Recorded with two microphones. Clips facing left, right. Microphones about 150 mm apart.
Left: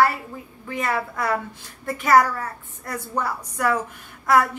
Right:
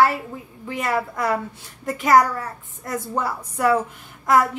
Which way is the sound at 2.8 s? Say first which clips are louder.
Right 2 dB; 20° right (ahead or behind).